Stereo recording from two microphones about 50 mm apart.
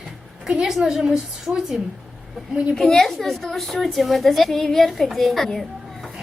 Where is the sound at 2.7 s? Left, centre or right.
Centre.